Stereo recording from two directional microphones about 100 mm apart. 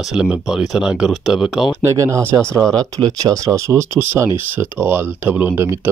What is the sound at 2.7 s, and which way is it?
Speech, 40° right (ahead or behind).